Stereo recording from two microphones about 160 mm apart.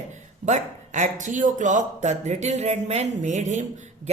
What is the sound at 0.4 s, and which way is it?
Speech, 50° right (ahead or behind).